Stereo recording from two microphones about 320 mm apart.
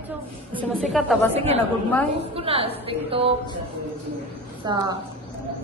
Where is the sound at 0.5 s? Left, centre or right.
Centre.